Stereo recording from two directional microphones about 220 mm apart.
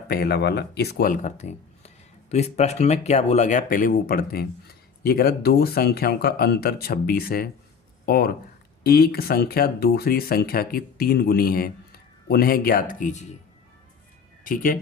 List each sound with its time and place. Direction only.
0.1 s speech: 45° left (ahead or behind)
14.4 s speech: 40° left (ahead or behind)